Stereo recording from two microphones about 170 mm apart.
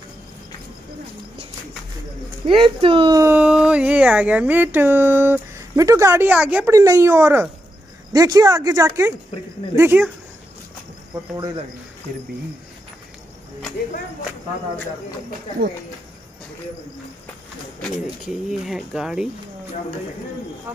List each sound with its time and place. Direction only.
2.4 s speech: 30° right (ahead or behind)
3.2 s speech: 10° right (ahead or behind)
11.3 s speech: 25° right (ahead or behind)
18.2 s speech: 5° right (ahead or behind)